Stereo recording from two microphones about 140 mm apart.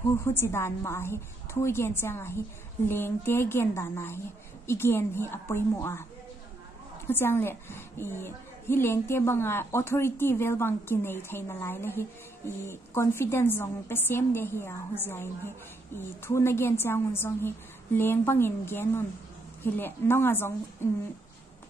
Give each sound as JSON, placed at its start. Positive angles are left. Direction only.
{"t": 0.1, "sound": "a woman's voice", "side_deg": 15}
{"t": 7.1, "sound": "a woman's voice", "side_deg": 15}